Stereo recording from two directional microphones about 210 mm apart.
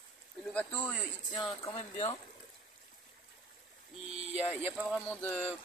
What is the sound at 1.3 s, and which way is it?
Speech, 20° left (ahead or behind).